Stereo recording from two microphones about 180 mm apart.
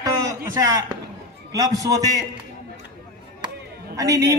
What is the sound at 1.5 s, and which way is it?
Speech, 20° right (ahead or behind).